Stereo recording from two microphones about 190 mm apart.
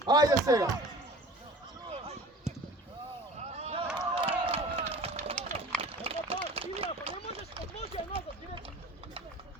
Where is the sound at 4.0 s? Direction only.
30° right (ahead or behind).